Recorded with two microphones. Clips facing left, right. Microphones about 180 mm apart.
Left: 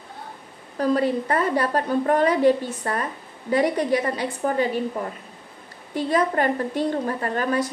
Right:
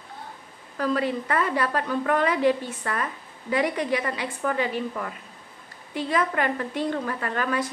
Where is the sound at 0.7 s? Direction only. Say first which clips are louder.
Left 4 dB; 40° left (ahead or behind).